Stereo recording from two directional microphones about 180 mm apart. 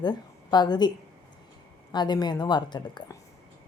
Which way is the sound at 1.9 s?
25° left (ahead or behind).